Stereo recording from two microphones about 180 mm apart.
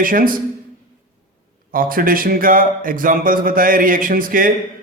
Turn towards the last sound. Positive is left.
turn(degrees=-50)  # may be behind; listen again after turning